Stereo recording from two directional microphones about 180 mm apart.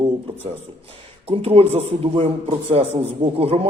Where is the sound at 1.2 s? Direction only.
35° right (ahead or behind).